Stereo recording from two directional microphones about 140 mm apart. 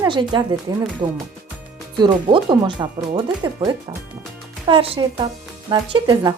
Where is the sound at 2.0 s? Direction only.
35° right (ahead or behind).